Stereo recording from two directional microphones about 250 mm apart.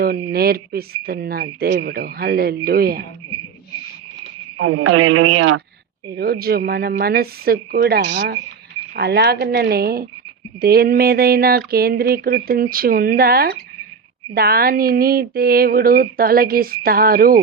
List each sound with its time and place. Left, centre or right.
0.0 s speech: right
4.5 s speech: right
6.1 s speech: right